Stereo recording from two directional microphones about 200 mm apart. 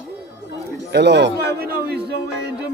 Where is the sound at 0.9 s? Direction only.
60° right (ahead or behind).